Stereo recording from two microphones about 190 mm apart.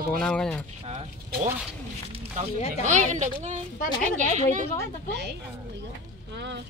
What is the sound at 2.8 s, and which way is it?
Speech, 40° right (ahead or behind).